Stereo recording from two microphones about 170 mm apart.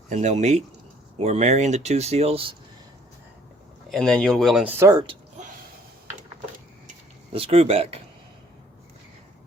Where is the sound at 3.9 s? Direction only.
5° left (ahead or behind).